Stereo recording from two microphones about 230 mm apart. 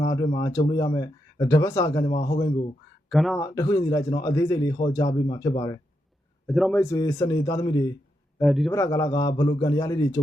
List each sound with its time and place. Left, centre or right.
0.1 s speech: centre
3.1 s a man's voice: centre
3.3 s speech: centre
6.5 s a man's voice: centre
6.7 s speech: centre
8.4 s a man's voice: centre
8.7 s speech: centre